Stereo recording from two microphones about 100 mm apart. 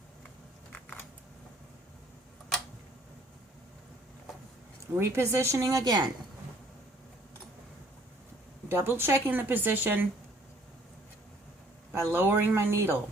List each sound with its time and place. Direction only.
4.9 s speech: 25° right (ahead or behind)
8.7 s speech: 20° right (ahead or behind)
11.9 s speech: 20° right (ahead or behind)